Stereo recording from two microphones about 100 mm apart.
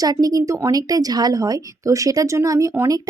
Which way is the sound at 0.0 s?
40° right (ahead or behind).